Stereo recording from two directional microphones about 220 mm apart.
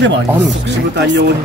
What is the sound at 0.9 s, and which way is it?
Speech, 50° right (ahead or behind).